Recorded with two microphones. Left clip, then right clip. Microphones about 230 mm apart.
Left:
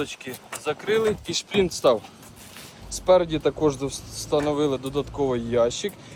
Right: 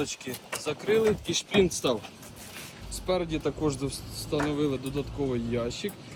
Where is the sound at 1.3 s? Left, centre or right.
Left.